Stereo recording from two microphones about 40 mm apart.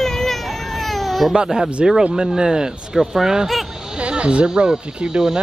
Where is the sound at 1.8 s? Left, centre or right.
Centre.